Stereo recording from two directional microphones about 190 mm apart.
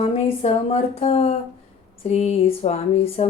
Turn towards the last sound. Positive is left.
turn(degrees=30)  # may be behind; listen again after turning